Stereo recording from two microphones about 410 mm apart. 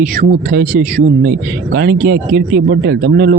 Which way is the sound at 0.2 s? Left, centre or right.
Right.